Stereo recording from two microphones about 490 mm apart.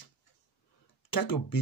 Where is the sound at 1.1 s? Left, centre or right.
Left.